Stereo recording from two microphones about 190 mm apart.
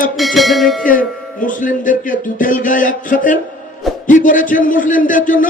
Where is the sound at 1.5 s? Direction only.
45° left (ahead or behind).